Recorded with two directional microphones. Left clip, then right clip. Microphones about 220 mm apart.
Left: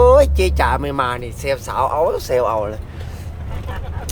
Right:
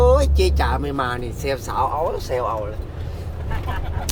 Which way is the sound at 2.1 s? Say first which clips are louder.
Left 6 dB; 20° left (ahead or behind).